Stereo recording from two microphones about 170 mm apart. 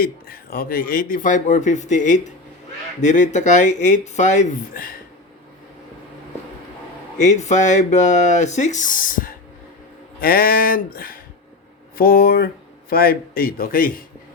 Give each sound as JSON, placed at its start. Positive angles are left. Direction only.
{"t": 0.0, "sound": "speech", "side_deg": 60}
{"t": 7.2, "sound": "a man's voice", "side_deg": 45}